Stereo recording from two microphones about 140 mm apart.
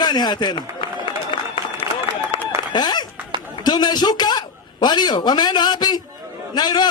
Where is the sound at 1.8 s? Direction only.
40° left (ahead or behind).